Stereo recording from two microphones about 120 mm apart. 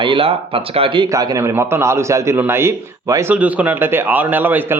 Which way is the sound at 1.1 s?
30° right (ahead or behind).